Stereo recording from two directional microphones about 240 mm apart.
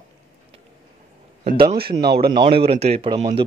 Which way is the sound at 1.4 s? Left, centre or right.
Right.